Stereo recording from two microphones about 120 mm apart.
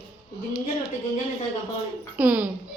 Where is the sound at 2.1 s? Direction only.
15° right (ahead or behind).